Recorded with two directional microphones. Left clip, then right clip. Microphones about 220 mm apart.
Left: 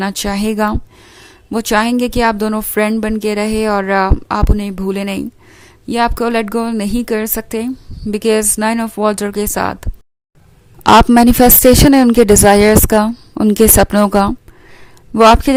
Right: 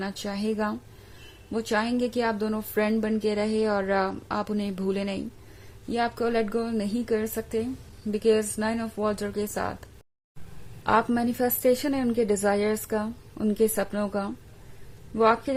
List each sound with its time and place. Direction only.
0.0 s speech: 40° left (ahead or behind)